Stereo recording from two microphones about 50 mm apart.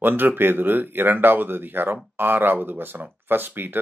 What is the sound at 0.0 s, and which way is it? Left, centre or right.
Speech, right.